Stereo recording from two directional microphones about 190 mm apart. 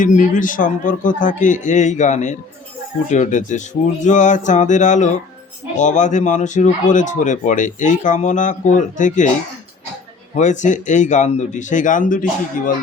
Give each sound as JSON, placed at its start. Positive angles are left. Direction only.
{"t": 0.0, "sound": "speech", "side_deg": 45}
{"t": 10.3, "sound": "speech", "side_deg": 40}